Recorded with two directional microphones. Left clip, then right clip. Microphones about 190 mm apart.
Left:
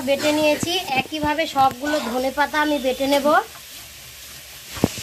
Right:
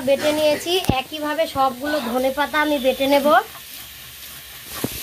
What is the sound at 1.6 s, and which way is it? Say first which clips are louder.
Sizzle: left 2 dB; 15° right (ahead or behind).